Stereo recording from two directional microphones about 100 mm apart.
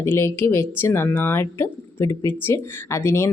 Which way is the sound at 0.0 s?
25° left (ahead or behind).